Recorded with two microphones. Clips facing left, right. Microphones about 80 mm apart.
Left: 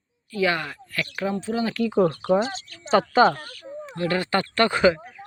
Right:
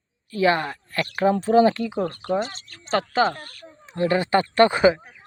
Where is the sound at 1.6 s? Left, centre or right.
Right.